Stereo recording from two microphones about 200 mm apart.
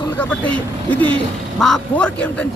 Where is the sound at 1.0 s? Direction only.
25° right (ahead or behind).